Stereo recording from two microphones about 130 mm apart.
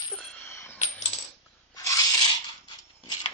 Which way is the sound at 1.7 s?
30° left (ahead or behind).